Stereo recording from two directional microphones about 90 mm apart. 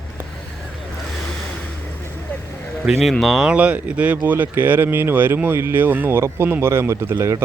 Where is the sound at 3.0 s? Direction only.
Centre (ahead or behind).